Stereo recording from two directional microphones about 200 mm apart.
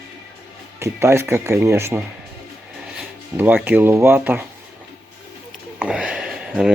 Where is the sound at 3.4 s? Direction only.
10° right (ahead or behind).